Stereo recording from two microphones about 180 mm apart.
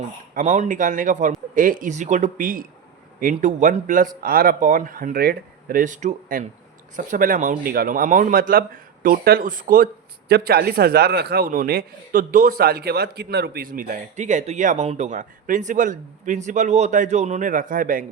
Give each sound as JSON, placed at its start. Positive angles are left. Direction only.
{"t": 0.3, "sound": "speech", "side_deg": -45}